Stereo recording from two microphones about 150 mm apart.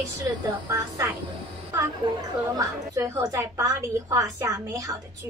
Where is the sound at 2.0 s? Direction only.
30° right (ahead or behind).